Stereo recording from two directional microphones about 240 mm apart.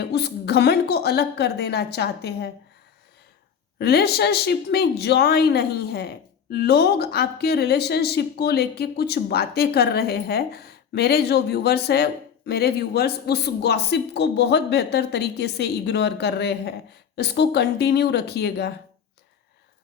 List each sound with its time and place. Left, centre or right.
0.0 s a woman's voice: left
3.8 s a woman's voice: left